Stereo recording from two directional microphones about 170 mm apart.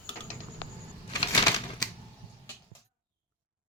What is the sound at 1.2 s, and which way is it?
Typewriter, 25° left (ahead or behind).